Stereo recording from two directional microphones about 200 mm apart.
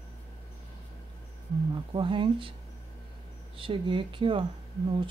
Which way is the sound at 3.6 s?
25° right (ahead or behind).